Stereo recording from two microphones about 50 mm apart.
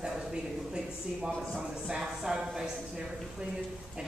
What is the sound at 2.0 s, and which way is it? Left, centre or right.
Speech, centre.